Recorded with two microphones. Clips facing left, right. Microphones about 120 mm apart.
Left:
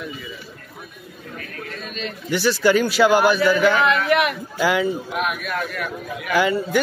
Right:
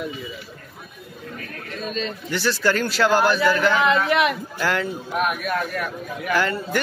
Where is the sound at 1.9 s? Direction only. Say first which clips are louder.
Right 5 dB; 35° right (ahead or behind).